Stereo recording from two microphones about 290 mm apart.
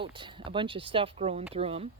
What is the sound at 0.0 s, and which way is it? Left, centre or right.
A woman's voice, centre.